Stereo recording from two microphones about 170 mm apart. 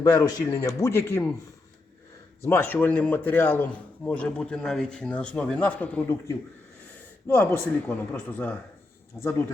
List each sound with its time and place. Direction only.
0.0 s a man's voice: 20° left (ahead or behind)
2.4 s a man's voice: 15° left (ahead or behind)